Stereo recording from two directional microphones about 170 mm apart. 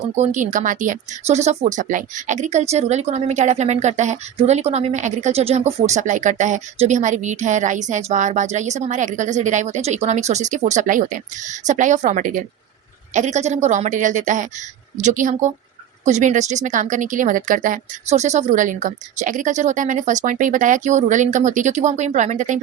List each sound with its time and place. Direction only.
0.2 s speech: 45° right (ahead or behind)